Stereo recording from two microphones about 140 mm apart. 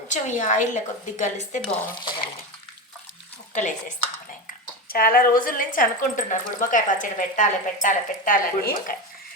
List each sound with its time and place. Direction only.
0.1 s a woman's voice: 60° left (ahead or behind)
3.5 s a woman's voice: 65° left (ahead or behind)
4.9 s a woman's voice: 90° left